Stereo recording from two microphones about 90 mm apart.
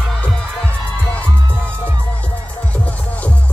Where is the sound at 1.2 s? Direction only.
25° right (ahead or behind).